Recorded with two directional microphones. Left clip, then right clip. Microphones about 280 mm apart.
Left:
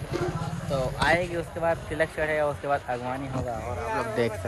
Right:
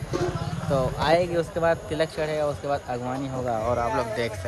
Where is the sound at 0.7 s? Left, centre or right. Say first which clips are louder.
Right 2 dB; centre.